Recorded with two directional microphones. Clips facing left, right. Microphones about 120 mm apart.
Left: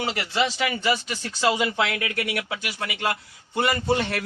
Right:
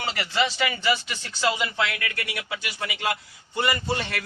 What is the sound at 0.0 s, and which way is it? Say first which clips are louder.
Speech: left 1 dB; 15° left (ahead or behind).